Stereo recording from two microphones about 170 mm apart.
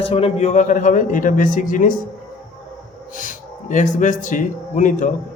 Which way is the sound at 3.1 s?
50° left (ahead or behind).